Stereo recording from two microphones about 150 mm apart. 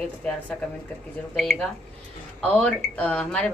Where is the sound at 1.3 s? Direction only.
5° left (ahead or behind).